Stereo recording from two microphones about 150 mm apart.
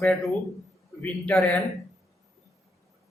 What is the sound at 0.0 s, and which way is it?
A man's voice, centre (ahead or behind).